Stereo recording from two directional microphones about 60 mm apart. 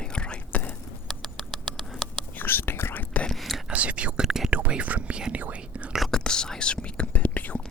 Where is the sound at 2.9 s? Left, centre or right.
Left.